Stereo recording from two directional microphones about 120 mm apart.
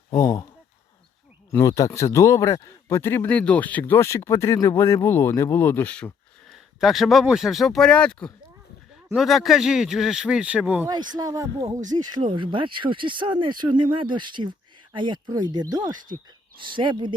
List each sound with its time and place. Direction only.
0.2 s a sound: 25° left (ahead or behind)
1.5 s a man's voice: 25° left (ahead or behind)
4.5 s a man's voice: 35° left (ahead or behind)
4.8 s a man's voice: 20° left (ahead or behind)
6.5 s speech: centre (ahead or behind)
11.1 s speech: 30° right (ahead or behind)
11.8 s speech: 90° right
12.2 s speech: 45° right (ahead or behind)
16.6 s speech: 45° right (ahead or behind)